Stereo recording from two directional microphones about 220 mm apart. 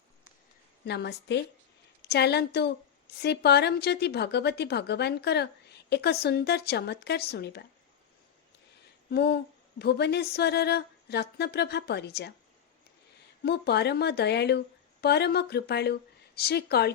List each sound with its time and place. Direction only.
0.9 s speech: 50° left (ahead or behind)
9.0 s speech: 45° left (ahead or behind)
13.4 s speech: 50° left (ahead or behind)